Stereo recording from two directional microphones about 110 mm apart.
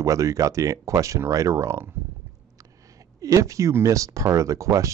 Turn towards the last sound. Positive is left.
turn(degrees=-30)  # may be behind; listen again after turning